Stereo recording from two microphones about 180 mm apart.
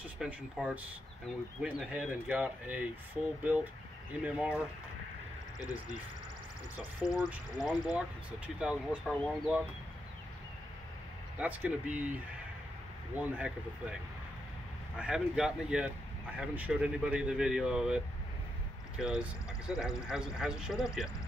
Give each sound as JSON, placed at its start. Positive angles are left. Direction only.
{"t": 0.2, "sound": "speech", "side_deg": -5}
{"t": 4.2, "sound": "speech", "side_deg": -5}
{"t": 7.0, "sound": "speech", "side_deg": 20}
{"t": 7.6, "sound": "speech", "side_deg": 0}
{"t": 9.1, "sound": "speech", "side_deg": 5}
{"t": 11.3, "sound": "speech", "side_deg": -10}
{"t": 15.0, "sound": "speech", "side_deg": -5}